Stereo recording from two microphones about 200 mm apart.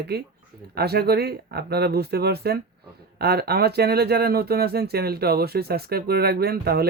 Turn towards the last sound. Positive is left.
turn(degrees=-50)  # may be behind; listen again after turning